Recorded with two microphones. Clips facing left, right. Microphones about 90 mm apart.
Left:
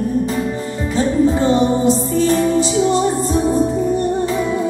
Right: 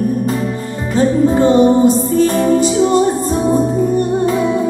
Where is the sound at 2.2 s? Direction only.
50° right (ahead or behind).